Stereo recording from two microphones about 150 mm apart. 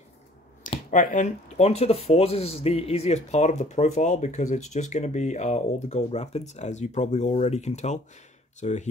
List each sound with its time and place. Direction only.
0.8 s speech: 60° left (ahead or behind)